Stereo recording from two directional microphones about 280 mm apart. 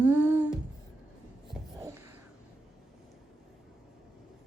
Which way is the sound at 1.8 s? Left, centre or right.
Centre.